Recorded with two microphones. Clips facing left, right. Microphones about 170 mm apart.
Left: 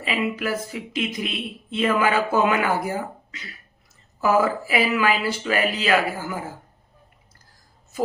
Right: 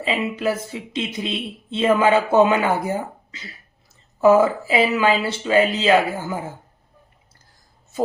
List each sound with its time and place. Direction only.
0.0 s speech: 25° right (ahead or behind)